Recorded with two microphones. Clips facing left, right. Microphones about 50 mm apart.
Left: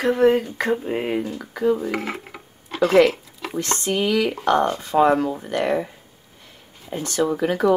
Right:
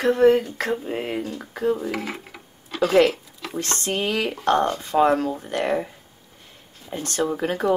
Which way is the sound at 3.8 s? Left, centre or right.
Right.